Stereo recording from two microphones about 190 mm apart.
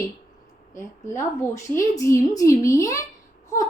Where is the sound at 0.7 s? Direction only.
15° left (ahead or behind).